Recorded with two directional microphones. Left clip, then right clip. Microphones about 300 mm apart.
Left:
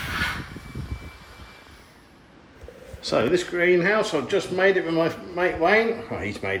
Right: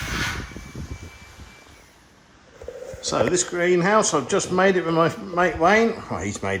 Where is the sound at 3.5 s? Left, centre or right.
Centre.